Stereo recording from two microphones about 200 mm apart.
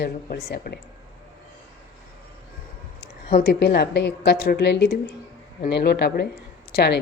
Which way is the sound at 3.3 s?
50° left (ahead or behind).